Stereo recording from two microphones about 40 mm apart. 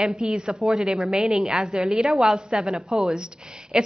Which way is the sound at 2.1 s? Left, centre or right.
Centre.